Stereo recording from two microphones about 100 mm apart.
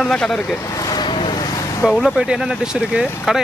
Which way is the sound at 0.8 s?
50° left (ahead or behind).